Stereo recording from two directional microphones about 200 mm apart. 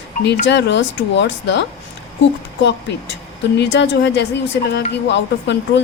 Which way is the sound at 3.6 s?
60° left (ahead or behind).